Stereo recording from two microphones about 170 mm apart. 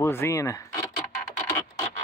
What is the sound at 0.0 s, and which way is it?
Speech, 15° left (ahead or behind).